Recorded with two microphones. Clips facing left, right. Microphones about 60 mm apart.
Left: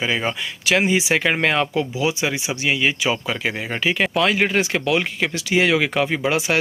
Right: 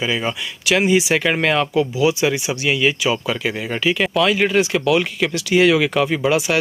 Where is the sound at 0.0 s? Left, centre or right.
Left.